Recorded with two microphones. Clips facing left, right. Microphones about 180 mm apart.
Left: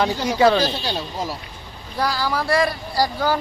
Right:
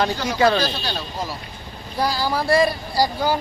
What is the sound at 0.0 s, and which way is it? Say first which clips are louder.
Speech: left 2 dB; 20° left (ahead or behind).